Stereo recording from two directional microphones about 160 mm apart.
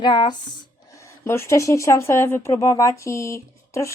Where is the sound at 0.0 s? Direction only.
30° left (ahead or behind).